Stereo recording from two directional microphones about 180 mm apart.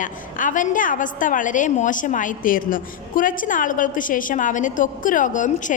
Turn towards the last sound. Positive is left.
turn(degrees=45)  # may be behind; listen again after turning